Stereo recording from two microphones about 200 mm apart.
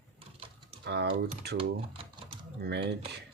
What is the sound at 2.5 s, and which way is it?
Speech, 55° right (ahead or behind).